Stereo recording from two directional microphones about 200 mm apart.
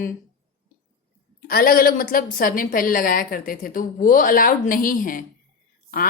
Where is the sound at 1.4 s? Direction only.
45° left (ahead or behind).